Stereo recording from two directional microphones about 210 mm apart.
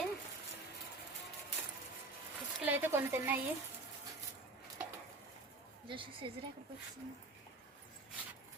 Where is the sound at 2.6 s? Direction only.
10° right (ahead or behind).